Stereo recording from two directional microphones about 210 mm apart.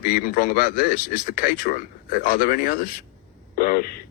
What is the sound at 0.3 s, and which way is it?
Speech, 40° left (ahead or behind).